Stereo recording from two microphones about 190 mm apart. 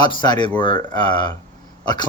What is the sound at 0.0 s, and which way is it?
Speech, 25° left (ahead or behind).